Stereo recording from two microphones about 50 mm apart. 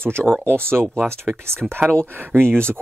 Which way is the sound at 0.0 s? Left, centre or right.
Right.